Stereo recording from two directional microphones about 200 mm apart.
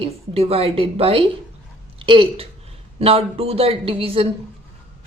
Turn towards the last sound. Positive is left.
turn(degrees=-25)  # may be behind; listen again after turning